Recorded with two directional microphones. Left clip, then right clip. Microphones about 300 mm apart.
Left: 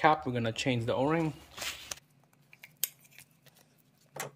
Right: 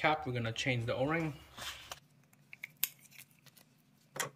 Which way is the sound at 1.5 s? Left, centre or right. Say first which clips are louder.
Left 5 dB; left.